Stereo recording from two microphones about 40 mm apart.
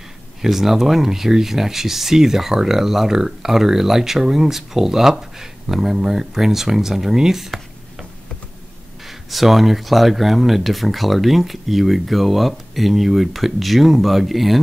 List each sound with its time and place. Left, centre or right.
0.4 s speech: centre
9.0 s speech: centre